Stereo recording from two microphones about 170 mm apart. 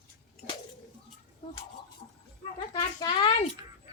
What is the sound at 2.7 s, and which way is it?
Speech, 30° left (ahead or behind).